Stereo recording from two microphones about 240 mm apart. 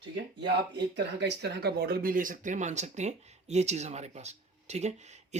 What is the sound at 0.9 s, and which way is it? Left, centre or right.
Speech, right.